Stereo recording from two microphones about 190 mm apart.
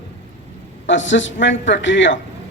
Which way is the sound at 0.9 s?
75° left (ahead or behind).